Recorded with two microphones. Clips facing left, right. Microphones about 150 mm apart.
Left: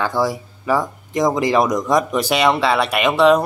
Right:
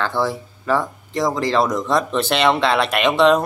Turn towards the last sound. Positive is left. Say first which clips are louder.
# left 1 dB
turn(degrees=10)  # may be behind; listen again after turning